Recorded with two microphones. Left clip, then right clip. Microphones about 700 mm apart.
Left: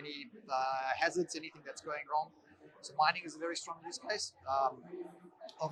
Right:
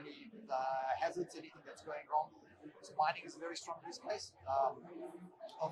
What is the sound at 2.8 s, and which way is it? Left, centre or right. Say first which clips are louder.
Speech: left 5 dB; left.